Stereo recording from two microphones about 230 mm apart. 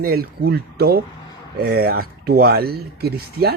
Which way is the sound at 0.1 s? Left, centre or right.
Right.